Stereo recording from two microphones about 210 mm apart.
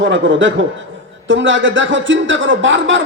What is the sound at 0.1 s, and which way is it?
Speech, 60° right (ahead or behind).